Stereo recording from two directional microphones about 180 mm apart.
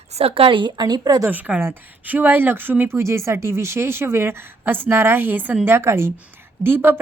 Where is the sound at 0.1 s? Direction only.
35° right (ahead or behind).